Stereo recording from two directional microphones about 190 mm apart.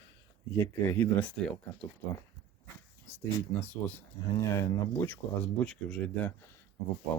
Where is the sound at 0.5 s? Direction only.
10° left (ahead or behind).